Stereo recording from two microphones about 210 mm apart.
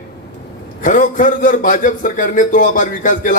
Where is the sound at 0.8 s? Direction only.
40° left (ahead or behind).